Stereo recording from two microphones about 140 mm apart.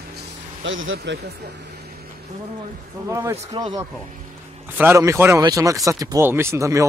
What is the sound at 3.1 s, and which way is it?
Speech, 20° right (ahead or behind).